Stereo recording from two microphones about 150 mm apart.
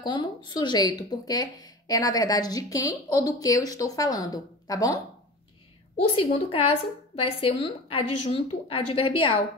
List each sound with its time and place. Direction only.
0.0 s speech: 30° left (ahead or behind)
5.9 s a woman's voice: 40° left (ahead or behind)